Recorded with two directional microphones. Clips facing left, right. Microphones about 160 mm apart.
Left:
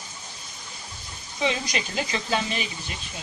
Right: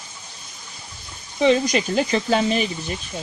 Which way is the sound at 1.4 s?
45° right (ahead or behind).